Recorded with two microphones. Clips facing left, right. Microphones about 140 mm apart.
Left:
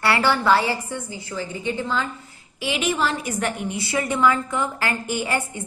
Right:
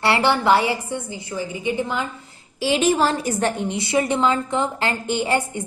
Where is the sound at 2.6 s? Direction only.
35° right (ahead or behind).